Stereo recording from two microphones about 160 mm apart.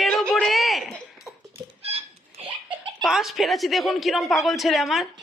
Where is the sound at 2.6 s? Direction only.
5° right (ahead or behind).